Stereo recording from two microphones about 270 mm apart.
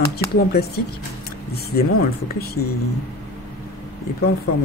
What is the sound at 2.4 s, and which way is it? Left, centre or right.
Speech, left.